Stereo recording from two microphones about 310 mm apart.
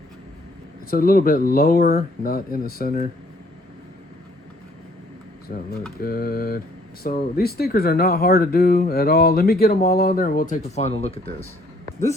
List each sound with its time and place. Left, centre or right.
0.9 s speech: left
5.5 s speech: left